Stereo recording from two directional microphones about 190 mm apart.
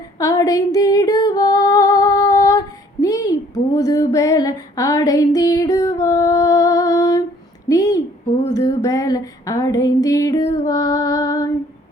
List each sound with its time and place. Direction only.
0.2 s female singing: 20° left (ahead or behind)
7.7 s a sound: 15° left (ahead or behind)
8.5 s music: 20° left (ahead or behind)